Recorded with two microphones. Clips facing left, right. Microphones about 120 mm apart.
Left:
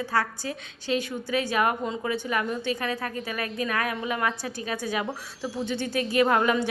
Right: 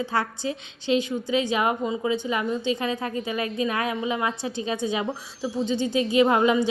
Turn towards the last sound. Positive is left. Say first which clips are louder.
# right 3 dB
turn(degrees=-15)  # may be behind; listen again after turning